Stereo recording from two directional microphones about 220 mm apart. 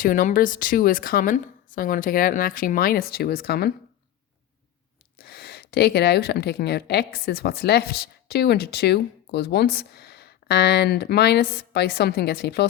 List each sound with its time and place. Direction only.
0.0 s speech: 40° left (ahead or behind)
5.1 s speech: 45° left (ahead or behind)